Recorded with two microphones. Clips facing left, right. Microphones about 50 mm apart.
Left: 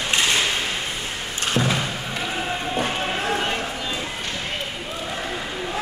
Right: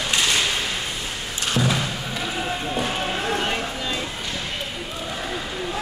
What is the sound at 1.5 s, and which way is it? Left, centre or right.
Thump, left.